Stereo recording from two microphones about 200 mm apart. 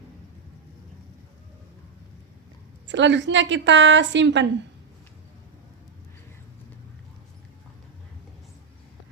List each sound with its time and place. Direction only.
2.9 s a woman's voice: 65° right (ahead or behind)